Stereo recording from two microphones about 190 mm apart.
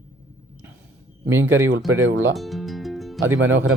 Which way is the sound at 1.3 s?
15° right (ahead or behind).